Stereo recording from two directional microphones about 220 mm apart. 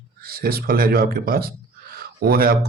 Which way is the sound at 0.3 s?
45° right (ahead or behind).